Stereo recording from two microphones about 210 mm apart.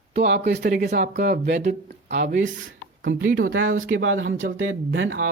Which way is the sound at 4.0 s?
45° right (ahead or behind).